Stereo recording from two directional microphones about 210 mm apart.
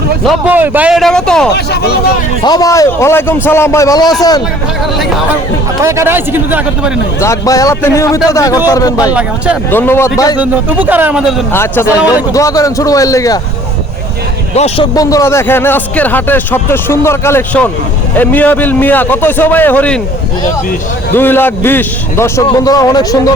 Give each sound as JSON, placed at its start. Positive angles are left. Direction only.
{"t": 0.3, "sound": "a man's voice", "side_deg": -10}
{"t": 2.4, "sound": "a man's voice", "side_deg": 20}
{"t": 5.8, "sound": "a man's voice", "side_deg": -15}
{"t": 7.2, "sound": "a man's voice", "side_deg": 15}
{"t": 10.4, "sound": "a man's voice", "side_deg": -10}
{"t": 11.5, "sound": "a man's voice", "side_deg": 10}
{"t": 14.5, "sound": "speech", "side_deg": 30}
{"t": 14.9, "sound": "a man's voice", "side_deg": 15}
{"t": 21.1, "sound": "a man's voice", "side_deg": 10}